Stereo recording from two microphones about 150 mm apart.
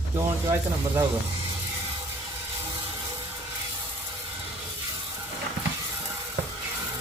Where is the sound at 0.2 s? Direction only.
15° right (ahead or behind).